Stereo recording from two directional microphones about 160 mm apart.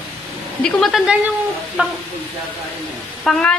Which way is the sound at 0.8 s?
Centre (ahead or behind).